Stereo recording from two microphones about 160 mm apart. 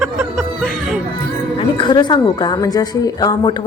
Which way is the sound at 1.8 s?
30° left (ahead or behind).